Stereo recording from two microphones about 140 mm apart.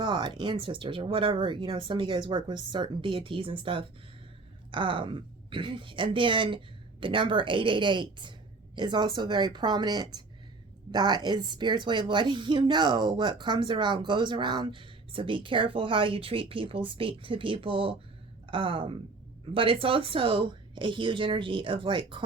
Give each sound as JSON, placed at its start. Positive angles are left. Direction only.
{"t": 0.0, "sound": "a woman's voice", "side_deg": -30}